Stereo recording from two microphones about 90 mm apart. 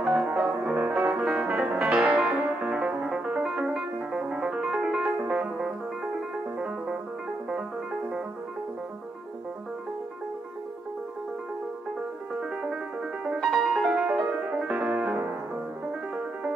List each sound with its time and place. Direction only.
0.0 s music: 15° right (ahead or behind)
13.2 s music: 5° right (ahead or behind)